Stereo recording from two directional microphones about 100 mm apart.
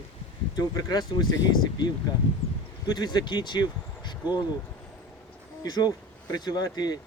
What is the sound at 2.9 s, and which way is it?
Speech, 45° left (ahead or behind).